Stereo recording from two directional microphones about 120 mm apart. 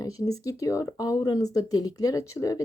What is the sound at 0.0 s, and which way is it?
Speech, 30° left (ahead or behind).